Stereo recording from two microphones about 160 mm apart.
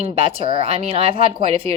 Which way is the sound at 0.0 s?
35° right (ahead or behind).